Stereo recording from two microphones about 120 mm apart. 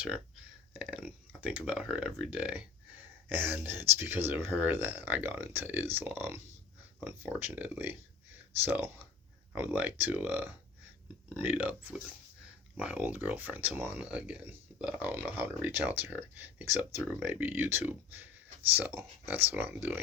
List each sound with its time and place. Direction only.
0.7 s speech: 10° right (ahead or behind)